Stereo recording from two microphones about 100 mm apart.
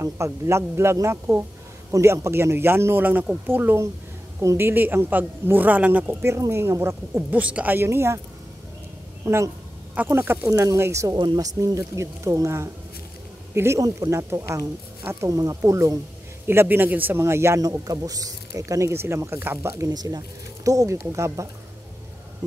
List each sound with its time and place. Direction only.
0.0 s a woman's voice: 30° right (ahead or behind)
9.2 s speech: 30° right (ahead or behind)
11.1 s speech: 45° right (ahead or behind); by 17.6 s 25° right (ahead or behind)
17.6 s speech: 40° right (ahead or behind)
19.9 s speech: 40° right (ahead or behind)